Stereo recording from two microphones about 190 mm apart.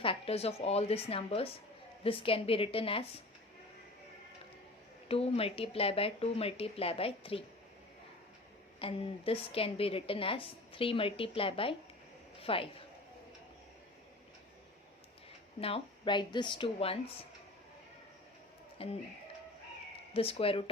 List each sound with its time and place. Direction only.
0.0 s a woman's voice: 30° left (ahead or behind)
5.0 s speech: 30° left (ahead or behind)
8.8 s a woman's voice: 30° left (ahead or behind)
15.6 s a woman's voice: 25° left (ahead or behind)
18.8 s a woman's voice: 30° left (ahead or behind)
20.1 s a woman's voice: 30° left (ahead or behind)